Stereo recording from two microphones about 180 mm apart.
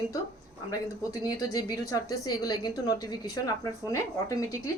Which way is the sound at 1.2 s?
20° left (ahead or behind).